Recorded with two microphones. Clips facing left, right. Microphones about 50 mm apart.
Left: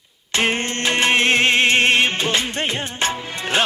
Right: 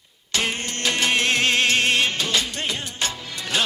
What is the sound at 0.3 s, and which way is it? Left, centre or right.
Music, left.